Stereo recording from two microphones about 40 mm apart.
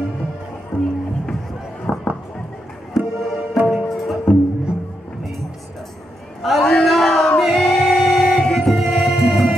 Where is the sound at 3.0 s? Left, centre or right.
Centre.